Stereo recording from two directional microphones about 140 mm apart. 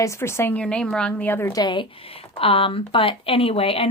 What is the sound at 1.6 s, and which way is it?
Speech, 35° left (ahead or behind).